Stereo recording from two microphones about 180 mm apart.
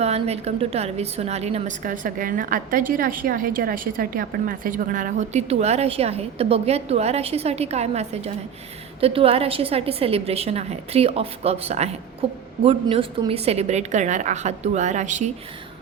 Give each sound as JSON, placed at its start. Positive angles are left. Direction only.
{"t": 0.0, "sound": "a woman's voice", "side_deg": -35}